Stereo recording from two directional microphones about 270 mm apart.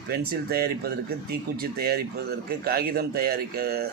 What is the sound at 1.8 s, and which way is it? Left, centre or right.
Speech, right.